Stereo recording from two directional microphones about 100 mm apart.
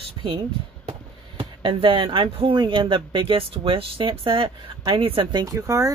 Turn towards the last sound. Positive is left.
turn(degrees=-30)  # may be behind; listen again after turning